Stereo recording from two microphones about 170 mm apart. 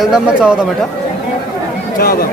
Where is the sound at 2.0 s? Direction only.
60° left (ahead or behind).